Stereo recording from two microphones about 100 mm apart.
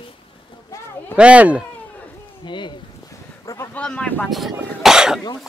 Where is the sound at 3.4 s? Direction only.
30° left (ahead or behind).